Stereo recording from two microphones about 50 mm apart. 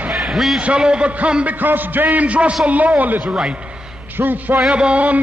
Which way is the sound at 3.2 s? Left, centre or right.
Centre.